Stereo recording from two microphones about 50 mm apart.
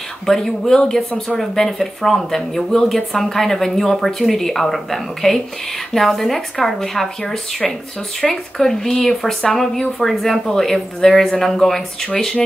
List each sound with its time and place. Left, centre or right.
0.3 s speech: centre
8.2 s speech: centre